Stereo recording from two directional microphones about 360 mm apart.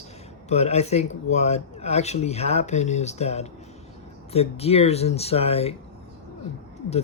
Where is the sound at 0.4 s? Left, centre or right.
Centre.